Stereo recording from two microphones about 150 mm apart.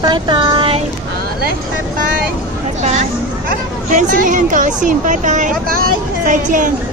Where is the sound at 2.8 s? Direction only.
50° right (ahead or behind).